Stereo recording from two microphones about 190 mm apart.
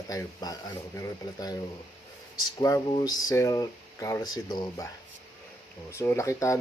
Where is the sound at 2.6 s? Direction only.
20° left (ahead or behind).